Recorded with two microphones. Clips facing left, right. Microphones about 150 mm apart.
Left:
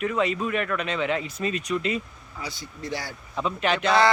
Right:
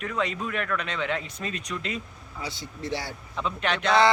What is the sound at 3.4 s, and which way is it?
Speech, 5° left (ahead or behind).